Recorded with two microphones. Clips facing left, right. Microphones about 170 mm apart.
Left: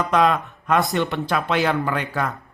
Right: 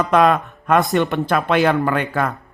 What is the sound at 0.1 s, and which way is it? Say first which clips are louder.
Speech: right 4 dB; 50° right (ahead or behind).